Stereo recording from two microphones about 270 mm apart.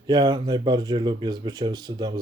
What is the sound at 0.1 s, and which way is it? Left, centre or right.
Speech, centre.